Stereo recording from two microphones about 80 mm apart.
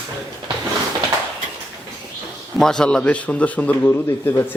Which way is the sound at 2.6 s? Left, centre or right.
Centre.